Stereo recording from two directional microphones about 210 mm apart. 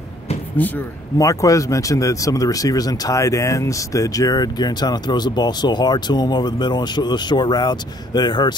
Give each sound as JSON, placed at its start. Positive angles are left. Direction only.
{"t": 0.6, "sound": "speech", "side_deg": 10}